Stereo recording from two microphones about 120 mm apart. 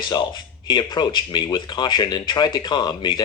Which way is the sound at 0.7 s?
40° left (ahead or behind).